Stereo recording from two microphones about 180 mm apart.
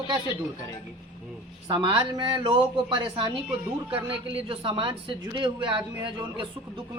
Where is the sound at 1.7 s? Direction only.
25° right (ahead or behind).